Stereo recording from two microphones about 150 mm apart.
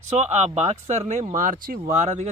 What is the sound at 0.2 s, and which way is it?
Speech, 50° right (ahead or behind).